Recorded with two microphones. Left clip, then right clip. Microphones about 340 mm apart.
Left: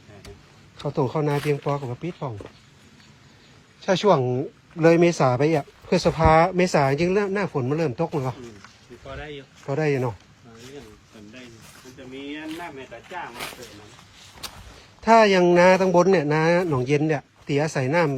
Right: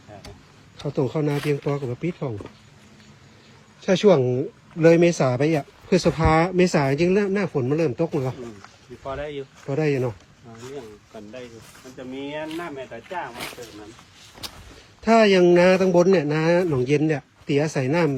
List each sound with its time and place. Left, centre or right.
0.8 s speech: centre
3.8 s speech: centre
9.1 s speech: centre
9.6 s speech: centre
13.1 s speech: centre
15.0 s speech: centre